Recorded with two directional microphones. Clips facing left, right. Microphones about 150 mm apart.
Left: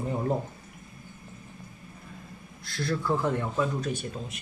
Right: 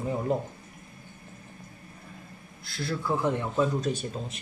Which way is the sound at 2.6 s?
5° right (ahead or behind).